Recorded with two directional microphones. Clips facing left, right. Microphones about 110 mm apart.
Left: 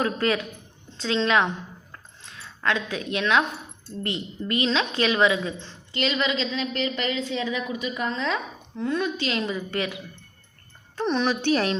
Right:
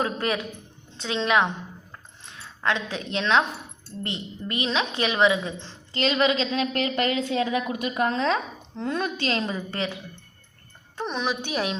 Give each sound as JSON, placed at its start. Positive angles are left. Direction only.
{"t": 0.0, "sound": "a woman's voice", "side_deg": -25}
{"t": 5.9, "sound": "a woman's voice", "side_deg": -40}
{"t": 11.0, "sound": "a woman's voice", "side_deg": -5}